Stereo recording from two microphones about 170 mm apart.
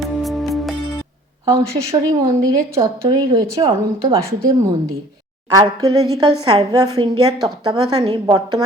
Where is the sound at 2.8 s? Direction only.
20° right (ahead or behind).